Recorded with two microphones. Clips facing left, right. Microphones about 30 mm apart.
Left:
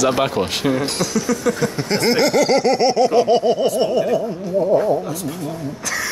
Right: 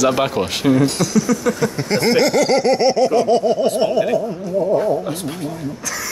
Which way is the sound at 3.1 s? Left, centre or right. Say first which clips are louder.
Even; left.